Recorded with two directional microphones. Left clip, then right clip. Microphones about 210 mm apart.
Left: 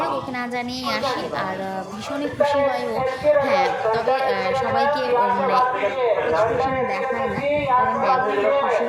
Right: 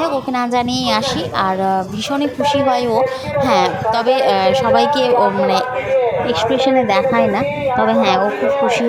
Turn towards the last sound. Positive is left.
turn(degrees=-40)  # may be behind; listen again after turning